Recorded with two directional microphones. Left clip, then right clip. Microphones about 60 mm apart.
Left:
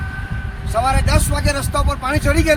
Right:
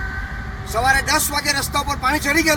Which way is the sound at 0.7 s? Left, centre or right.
Left.